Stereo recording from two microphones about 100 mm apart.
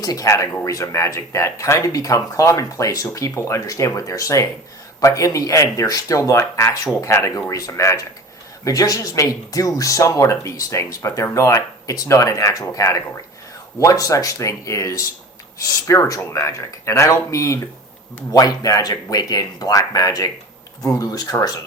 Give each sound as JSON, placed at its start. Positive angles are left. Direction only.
{"t": 0.0, "sound": "speech", "side_deg": 35}